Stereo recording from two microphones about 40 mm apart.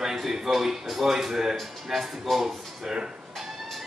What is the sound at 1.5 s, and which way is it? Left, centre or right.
Speech, centre.